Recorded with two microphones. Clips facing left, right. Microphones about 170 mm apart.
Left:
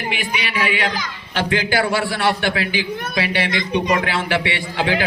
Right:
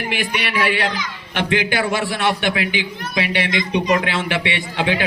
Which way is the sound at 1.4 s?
20° right (ahead or behind).